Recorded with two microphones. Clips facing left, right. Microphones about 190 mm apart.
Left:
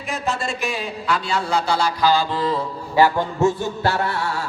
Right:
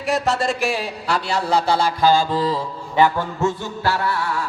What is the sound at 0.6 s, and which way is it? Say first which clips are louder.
Speech: right 3 dB; 80° right.